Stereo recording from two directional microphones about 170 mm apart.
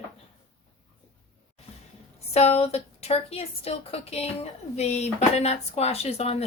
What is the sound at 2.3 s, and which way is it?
A woman's voice, 35° left (ahead or behind).